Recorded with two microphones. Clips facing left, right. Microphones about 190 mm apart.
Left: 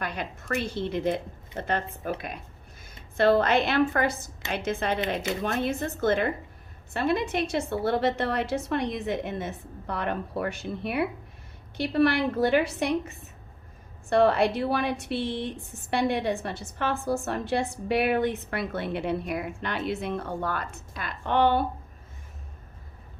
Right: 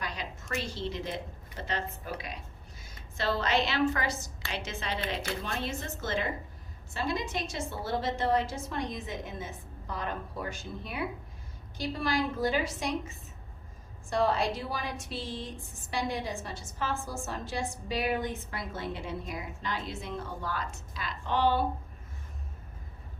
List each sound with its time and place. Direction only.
0.0 s a woman's voice: 55° left (ahead or behind)